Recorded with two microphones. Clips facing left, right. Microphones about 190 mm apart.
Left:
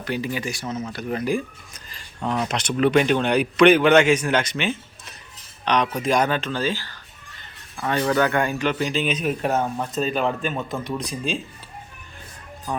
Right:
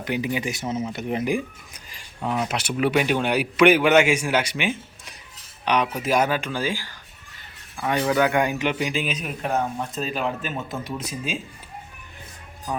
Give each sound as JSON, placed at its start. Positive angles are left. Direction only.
{"t": 0.0, "sound": "speech", "side_deg": -15}